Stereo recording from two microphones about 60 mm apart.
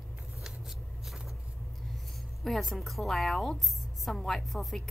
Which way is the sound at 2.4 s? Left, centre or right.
Centre.